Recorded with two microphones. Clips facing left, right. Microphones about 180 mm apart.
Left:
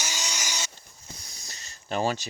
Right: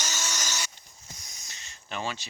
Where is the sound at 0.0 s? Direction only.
15° left (ahead or behind).